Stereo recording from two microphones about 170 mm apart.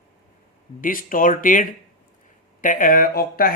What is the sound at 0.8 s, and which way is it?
Speech, 55° left (ahead or behind).